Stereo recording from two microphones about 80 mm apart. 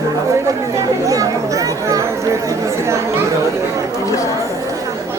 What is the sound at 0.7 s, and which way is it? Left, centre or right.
Speech, right.